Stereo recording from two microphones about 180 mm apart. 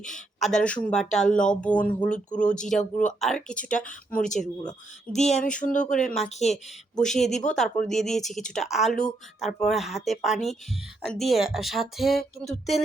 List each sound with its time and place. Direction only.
0.0 s speech: centre (ahead or behind)
5.1 s a sound: 40° left (ahead or behind)
6.0 s speech: 5° left (ahead or behind)
6.2 s speech: 40° left (ahead or behind)
7.0 s speech: centre (ahead or behind)